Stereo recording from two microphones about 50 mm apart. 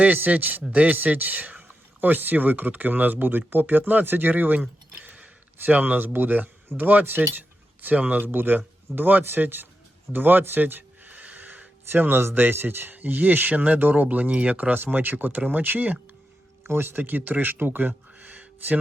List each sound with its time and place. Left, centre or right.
0.0 s speech: right
8.3 s speech: right
10.1 s a sound: right
11.9 s speech: right
16.6 s speech: right
16.9 s speech: right